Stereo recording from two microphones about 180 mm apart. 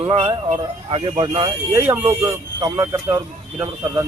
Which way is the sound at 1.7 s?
10° right (ahead or behind).